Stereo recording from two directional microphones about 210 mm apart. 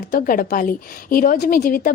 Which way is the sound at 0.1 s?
40° left (ahead or behind).